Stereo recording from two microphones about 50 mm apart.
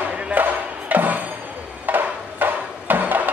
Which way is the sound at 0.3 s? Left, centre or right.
Right.